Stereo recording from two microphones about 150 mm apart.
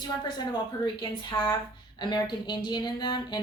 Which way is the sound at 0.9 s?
30° left (ahead or behind).